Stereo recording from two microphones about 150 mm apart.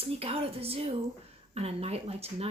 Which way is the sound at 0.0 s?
40° right (ahead or behind).